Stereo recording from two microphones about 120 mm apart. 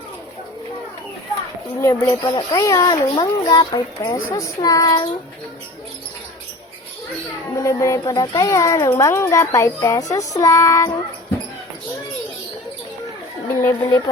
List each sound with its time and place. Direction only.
1.8 s a child's voice: 25° left (ahead or behind)
7.5 s a child's voice: 25° left (ahead or behind)
13.6 s a child's voice: 25° left (ahead or behind)